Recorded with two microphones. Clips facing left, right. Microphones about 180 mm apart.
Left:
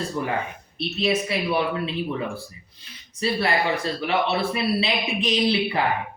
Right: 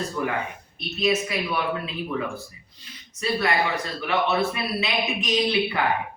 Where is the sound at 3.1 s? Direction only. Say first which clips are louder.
Left 1 dB; 30° left (ahead or behind).